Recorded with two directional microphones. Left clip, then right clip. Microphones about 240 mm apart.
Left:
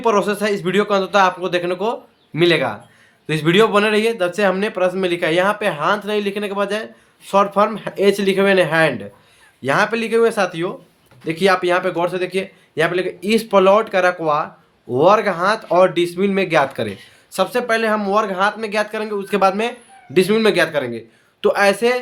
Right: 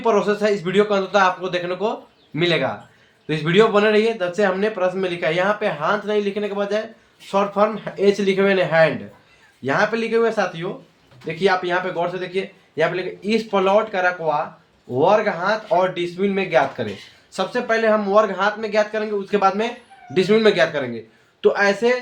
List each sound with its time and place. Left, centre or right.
0.0 s a man's voice: left